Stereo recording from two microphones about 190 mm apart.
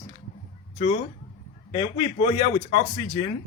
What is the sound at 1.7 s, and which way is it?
Speech, 25° left (ahead or behind).